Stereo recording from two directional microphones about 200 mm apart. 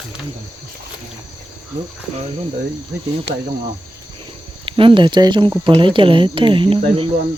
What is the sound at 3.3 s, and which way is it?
Speech, 55° right (ahead or behind).